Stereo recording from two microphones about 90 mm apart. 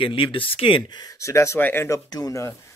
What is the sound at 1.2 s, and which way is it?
Speech, 35° left (ahead or behind).